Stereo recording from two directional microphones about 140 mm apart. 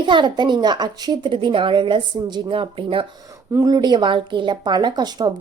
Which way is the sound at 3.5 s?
25° right (ahead or behind).